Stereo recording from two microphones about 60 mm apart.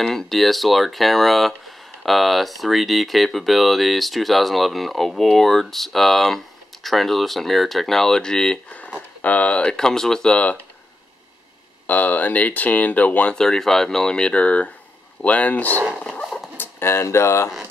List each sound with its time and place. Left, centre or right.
0.0 s speech: centre
9.2 s speech: left
9.8 s speech: centre
10.3 s speech: left
11.9 s speech: left
13.4 s speech: centre; by 15.7 s left
16.0 s dog: centre
16.5 s speech: left